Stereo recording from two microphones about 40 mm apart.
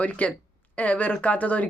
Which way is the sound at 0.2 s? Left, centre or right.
Left.